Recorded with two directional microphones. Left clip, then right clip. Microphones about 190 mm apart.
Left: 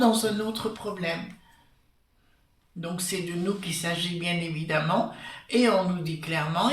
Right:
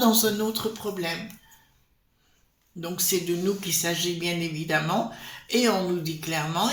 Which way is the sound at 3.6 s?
45° right (ahead or behind).